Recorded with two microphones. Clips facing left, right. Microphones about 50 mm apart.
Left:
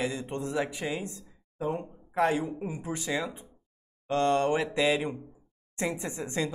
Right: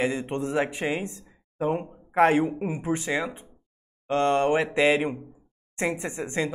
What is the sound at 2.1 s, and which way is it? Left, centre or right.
A woman's voice, right.